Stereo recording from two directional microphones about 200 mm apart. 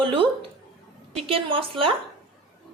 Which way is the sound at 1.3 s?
25° right (ahead or behind).